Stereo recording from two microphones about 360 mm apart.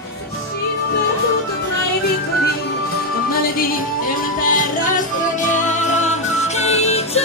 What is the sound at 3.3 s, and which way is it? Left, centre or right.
Music, left.